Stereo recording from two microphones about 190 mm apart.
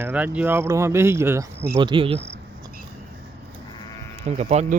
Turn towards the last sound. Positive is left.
turn(degrees=-35)  # may be behind; listen again after turning